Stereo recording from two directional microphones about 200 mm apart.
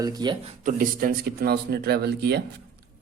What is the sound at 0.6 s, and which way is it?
Speech, 45° right (ahead or behind).